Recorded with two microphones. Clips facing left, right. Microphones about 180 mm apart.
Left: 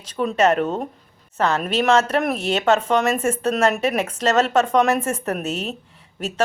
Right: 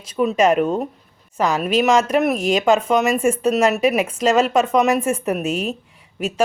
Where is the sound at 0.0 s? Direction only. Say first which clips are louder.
Right 2 dB; 10° right (ahead or behind).